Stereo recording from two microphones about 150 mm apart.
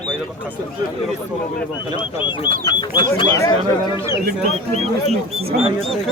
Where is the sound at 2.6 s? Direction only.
30° left (ahead or behind).